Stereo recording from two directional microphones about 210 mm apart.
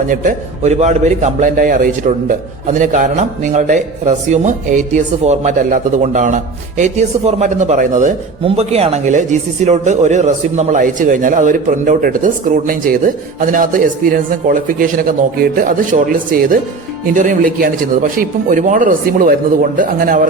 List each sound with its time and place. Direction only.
0.1 s a man's voice: 40° right (ahead or behind)